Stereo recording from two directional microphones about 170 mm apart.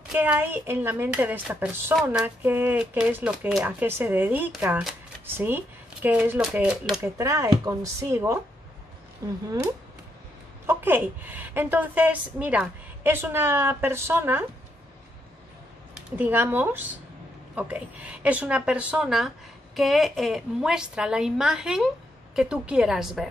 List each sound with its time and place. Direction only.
0.1 s a woman's voice: 10° right (ahead or behind)
7.2 s a woman's voice: 20° right (ahead or behind)
10.7 s a woman's voice: 10° right (ahead or behind)
16.2 s a woman's voice: 10° right (ahead or behind)